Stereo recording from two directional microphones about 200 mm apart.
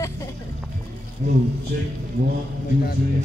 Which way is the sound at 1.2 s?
45° right (ahead or behind).